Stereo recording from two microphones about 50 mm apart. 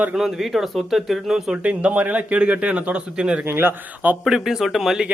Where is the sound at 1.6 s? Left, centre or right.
Right.